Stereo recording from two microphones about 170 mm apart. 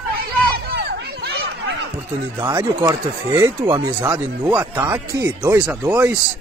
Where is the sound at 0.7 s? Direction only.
75° right (ahead or behind).